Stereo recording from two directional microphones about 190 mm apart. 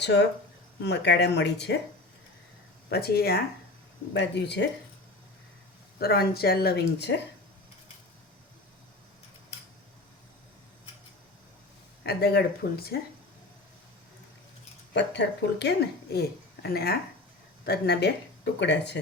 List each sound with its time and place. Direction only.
0.0 s speech: 65° left (ahead or behind)
2.9 s speech: 55° left (ahead or behind)
6.0 s speech: 55° left (ahead or behind)
12.0 s speech: 55° left (ahead or behind)
14.9 s speech: 70° left (ahead or behind)